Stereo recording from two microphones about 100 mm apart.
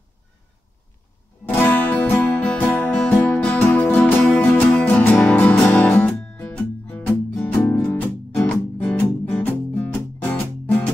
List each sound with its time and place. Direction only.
1.4 s music: 20° left (ahead or behind)